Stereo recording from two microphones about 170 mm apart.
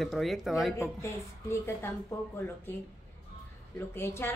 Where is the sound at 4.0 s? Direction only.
15° left (ahead or behind).